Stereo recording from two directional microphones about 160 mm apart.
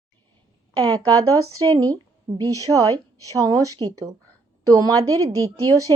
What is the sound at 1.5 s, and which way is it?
A woman's voice, 25° right (ahead or behind).